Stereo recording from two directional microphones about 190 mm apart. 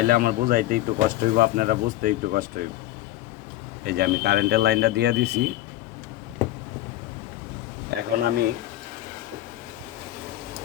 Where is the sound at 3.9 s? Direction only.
55° right (ahead or behind).